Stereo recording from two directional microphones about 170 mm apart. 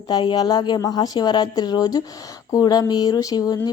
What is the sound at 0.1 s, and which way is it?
Speech, 25° left (ahead or behind).